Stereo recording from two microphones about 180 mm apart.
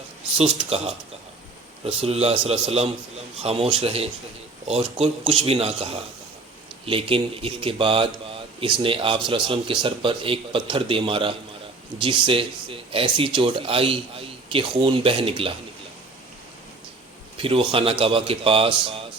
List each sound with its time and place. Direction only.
0.3 s a man's voice: 35° right (ahead or behind)
2.0 s a man's voice: 35° right (ahead or behind)
17.3 s a man's voice: 30° right (ahead or behind)